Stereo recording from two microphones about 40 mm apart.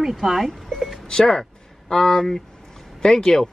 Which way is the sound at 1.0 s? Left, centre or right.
Centre.